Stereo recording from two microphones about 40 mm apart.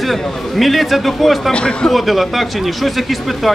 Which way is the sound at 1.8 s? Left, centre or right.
Centre.